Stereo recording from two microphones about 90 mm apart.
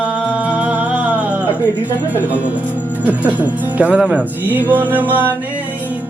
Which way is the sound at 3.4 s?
15° right (ahead or behind).